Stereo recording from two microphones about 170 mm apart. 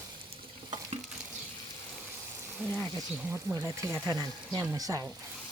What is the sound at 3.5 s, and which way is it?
Speech, 20° right (ahead or behind).